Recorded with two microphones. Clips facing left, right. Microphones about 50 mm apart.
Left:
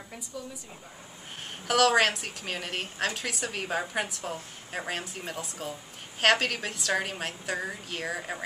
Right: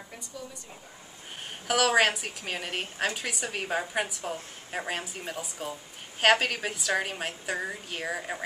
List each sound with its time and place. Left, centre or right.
1.7 s a woman's voice: centre